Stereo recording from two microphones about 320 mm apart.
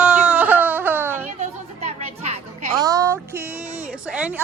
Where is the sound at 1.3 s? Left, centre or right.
Right.